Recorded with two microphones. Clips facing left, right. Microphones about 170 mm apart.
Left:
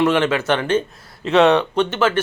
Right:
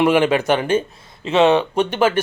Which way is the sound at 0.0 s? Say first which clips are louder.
Right 2 dB; 10° right (ahead or behind).